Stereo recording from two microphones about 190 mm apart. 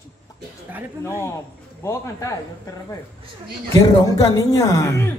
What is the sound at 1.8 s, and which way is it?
A man's voice, 15° left (ahead or behind).